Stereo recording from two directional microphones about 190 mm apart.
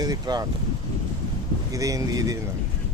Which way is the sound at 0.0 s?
20° right (ahead or behind).